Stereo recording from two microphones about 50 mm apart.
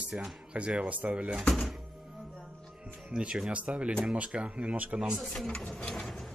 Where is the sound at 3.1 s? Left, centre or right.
Centre.